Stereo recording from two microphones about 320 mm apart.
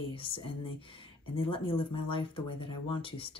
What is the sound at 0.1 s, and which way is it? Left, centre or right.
Speech, centre.